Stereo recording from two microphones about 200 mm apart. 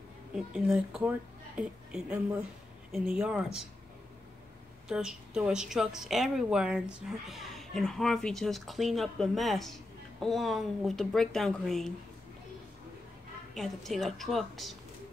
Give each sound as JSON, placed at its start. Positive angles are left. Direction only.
{"t": 0.5, "sound": "a woman's voice", "side_deg": -5}
{"t": 4.8, "sound": "a woman's voice", "side_deg": -5}
{"t": 13.6, "sound": "a woman's voice", "side_deg": 0}